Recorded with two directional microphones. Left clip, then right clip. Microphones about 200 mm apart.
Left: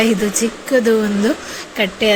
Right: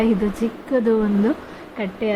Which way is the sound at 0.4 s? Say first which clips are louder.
Left 5 dB; 10° left (ahead or behind).